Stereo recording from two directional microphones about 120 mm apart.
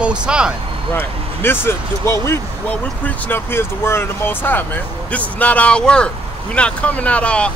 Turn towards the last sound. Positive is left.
turn(degrees=10)  # may be behind; listen again after turning